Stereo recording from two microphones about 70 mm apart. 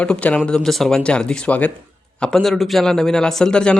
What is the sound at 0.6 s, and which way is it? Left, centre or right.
A man's voice, centre.